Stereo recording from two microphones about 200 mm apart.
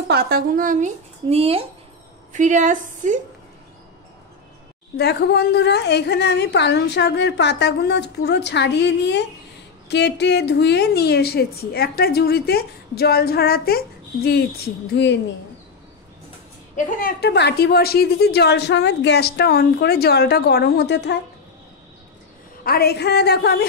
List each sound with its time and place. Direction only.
0.1 s speech: 45° right (ahead or behind)
4.9 s a woman's voice: 55° left (ahead or behind)
16.7 s a woman's voice: 50° left (ahead or behind)
22.6 s a woman's voice: 50° left (ahead or behind)